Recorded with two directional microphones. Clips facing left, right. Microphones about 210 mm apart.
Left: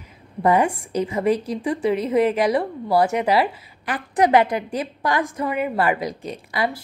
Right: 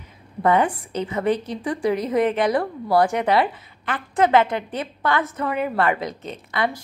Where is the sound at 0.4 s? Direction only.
10° left (ahead or behind).